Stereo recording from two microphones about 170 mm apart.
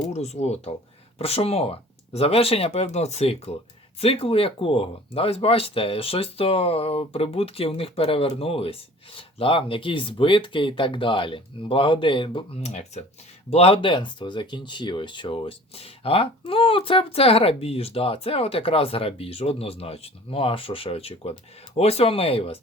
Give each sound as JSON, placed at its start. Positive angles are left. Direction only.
{"t": 0.0, "sound": "speech", "side_deg": 40}
{"t": 12.6, "sound": "speech", "side_deg": 40}